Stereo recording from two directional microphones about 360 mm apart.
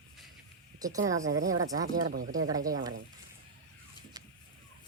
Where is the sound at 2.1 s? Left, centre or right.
Right.